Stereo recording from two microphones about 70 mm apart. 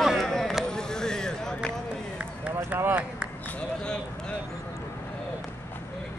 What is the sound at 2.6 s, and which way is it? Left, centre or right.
Run, right.